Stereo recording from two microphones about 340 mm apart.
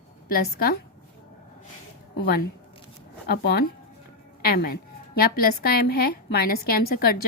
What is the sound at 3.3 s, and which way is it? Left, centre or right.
A woman's voice, left.